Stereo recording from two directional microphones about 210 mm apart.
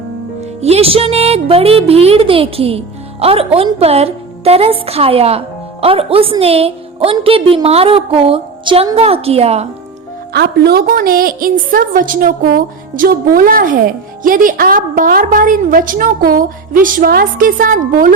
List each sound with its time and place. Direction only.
0.6 s speech: 30° right (ahead or behind)
10.3 s a woman's voice: 50° right (ahead or behind)